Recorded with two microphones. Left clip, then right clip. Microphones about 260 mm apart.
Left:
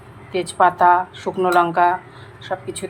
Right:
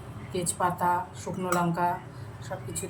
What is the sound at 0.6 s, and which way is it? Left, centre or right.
A woman's voice, left.